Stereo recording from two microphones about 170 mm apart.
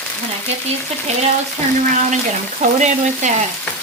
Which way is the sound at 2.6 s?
45° right (ahead or behind).